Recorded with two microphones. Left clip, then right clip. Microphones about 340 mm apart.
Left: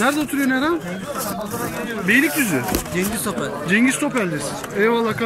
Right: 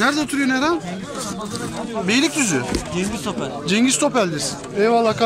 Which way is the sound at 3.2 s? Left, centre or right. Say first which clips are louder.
Left 1 dB; centre.